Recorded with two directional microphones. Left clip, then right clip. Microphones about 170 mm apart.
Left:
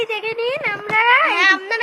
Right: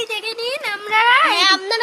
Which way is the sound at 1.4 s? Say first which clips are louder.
Even; 35° right (ahead or behind).